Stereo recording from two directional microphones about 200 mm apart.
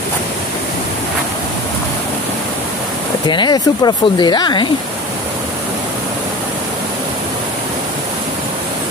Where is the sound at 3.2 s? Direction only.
20° left (ahead or behind).